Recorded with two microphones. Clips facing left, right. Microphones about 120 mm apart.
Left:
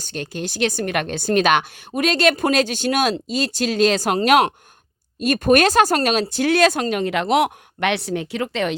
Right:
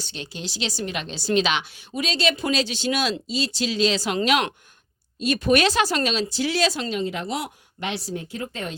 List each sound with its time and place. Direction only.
0.0 s a woman's voice: 50° left (ahead or behind); by 8.7 s 80° left